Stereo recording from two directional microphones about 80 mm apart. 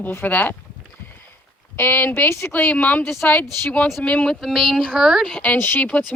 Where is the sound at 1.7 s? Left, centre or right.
Left.